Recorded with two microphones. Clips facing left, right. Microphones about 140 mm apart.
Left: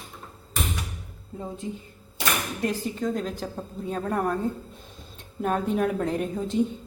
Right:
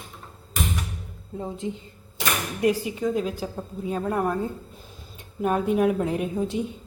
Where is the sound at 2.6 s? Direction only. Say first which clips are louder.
Right 8 dB; 10° right (ahead or behind).